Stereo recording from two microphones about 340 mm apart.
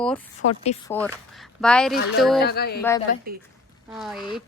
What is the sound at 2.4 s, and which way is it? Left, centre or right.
Speech, left.